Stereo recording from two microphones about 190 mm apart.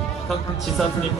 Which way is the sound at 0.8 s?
Centre (ahead or behind).